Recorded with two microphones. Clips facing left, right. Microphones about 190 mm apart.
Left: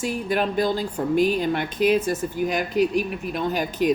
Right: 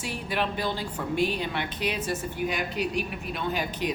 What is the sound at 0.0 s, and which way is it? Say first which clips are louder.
Speech: left 6 dB; 45° left (ahead or behind).